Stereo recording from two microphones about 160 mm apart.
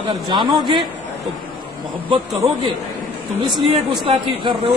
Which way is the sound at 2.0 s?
35° right (ahead or behind).